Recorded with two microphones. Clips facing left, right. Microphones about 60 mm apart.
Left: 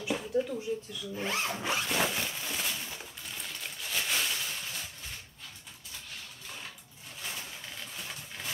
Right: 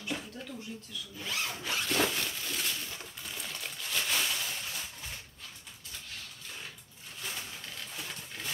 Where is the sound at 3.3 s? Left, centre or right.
Centre.